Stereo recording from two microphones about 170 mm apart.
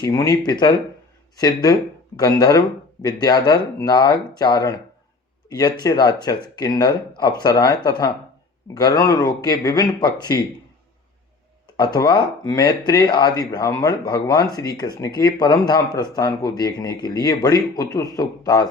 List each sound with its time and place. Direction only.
0.0 s speech: 20° left (ahead or behind)
5.5 s speech: 25° left (ahead or behind)
11.8 s speech: 25° left (ahead or behind)